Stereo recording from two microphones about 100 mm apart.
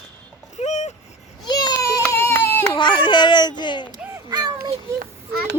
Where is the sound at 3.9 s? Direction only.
40° right (ahead or behind).